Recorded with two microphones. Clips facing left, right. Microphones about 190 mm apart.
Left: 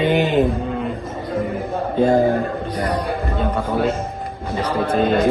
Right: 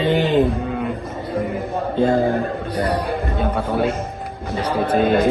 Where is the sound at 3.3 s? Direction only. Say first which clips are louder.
Even; 10° right (ahead or behind).